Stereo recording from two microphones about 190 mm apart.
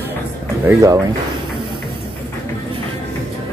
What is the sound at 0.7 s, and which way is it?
Speech, 15° right (ahead or behind).